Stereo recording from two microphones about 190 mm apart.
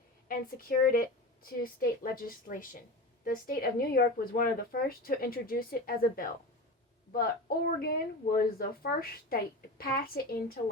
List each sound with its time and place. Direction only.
0.3 s a woman's voice: 45° left (ahead or behind)